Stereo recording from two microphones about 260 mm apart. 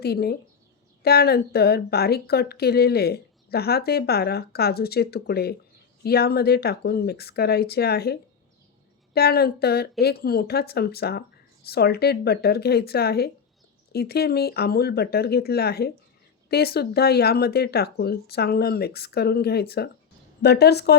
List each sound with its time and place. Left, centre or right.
0.0 s speech: left